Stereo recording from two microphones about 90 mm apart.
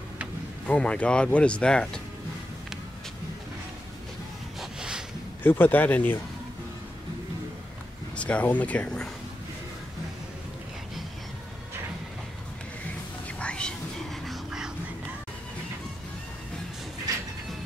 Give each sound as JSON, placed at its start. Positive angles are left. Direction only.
{"t": 0.7, "sound": "speech", "side_deg": 10}
{"t": 4.6, "sound": "a sound", "side_deg": -5}
{"t": 5.4, "sound": "speech", "side_deg": 20}
{"t": 8.2, "sound": "speech", "side_deg": 15}
{"t": 13.4, "sound": "whispering", "side_deg": 10}
{"t": 14.2, "sound": "a sound", "side_deg": -5}